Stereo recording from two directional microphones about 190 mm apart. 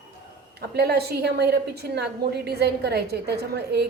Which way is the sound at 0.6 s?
60° right (ahead or behind).